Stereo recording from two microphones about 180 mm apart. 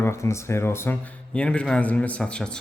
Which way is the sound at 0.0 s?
15° left (ahead or behind).